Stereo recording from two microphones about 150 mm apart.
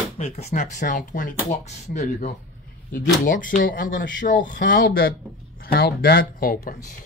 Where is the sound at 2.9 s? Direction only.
65° left (ahead or behind).